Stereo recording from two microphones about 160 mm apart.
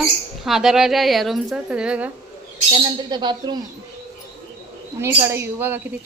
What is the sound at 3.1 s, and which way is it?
Speech, 30° right (ahead or behind).